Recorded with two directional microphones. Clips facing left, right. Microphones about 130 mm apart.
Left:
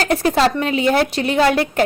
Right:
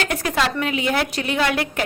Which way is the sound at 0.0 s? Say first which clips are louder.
Left 6 dB; 35° left (ahead or behind).